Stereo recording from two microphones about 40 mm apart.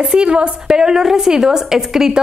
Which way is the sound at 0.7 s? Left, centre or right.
Centre.